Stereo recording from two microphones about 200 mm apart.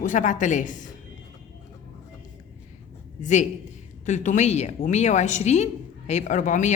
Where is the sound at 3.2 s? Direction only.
35° left (ahead or behind).